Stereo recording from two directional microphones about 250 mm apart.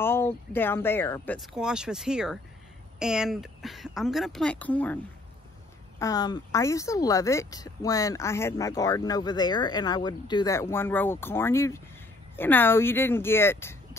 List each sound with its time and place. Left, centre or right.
0.0 s speech: centre